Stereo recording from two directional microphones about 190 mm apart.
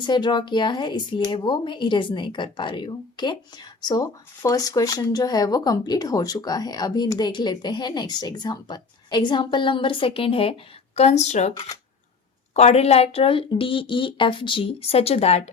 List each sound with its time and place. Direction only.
0.0 s speech: 20° left (ahead or behind)